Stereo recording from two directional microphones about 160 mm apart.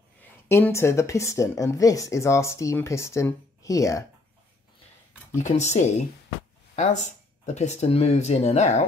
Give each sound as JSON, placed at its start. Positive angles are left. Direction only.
{"t": 0.2, "sound": "speech", "side_deg": 15}
{"t": 5.4, "sound": "speech", "side_deg": 45}
{"t": 6.7, "sound": "a sound", "side_deg": 45}
{"t": 7.4, "sound": "speech", "side_deg": 45}